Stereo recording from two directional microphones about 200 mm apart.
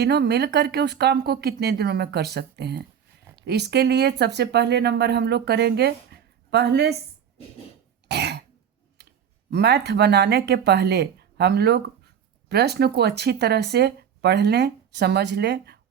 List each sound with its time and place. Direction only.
0.0 s speech: 55° right (ahead or behind)
6.1 s a sound: 55° right (ahead or behind)
6.5 s speech: 55° right (ahead or behind)
8.0 s throat clearing: 55° right (ahead or behind)
9.5 s speech: 55° right (ahead or behind)